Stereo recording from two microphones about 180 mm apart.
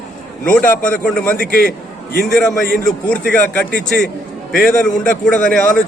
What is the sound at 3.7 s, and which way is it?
Speech, 60° left (ahead or behind).